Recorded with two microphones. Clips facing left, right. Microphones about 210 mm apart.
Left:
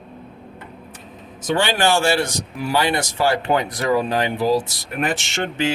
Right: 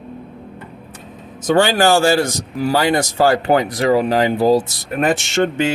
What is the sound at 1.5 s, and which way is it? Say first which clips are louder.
A man's voice: right 5 dB; 40° right (ahead or behind).